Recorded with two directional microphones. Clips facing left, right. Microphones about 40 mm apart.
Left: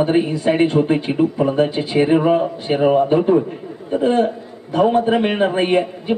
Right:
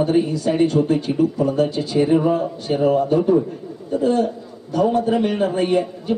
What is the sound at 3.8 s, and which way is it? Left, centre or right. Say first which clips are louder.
A man's voice: left 2 dB; left.